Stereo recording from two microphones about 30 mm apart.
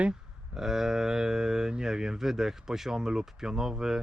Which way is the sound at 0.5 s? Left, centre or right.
Centre.